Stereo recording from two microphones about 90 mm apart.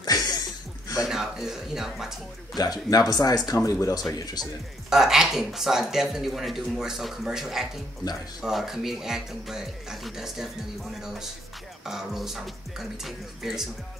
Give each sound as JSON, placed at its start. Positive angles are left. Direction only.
{"t": 0.0, "sound": "a sound", "side_deg": 45}
{"t": 0.9, "sound": "speech", "side_deg": -5}
{"t": 2.5, "sound": "speech", "side_deg": 45}
{"t": 4.8, "sound": "speech", "side_deg": -5}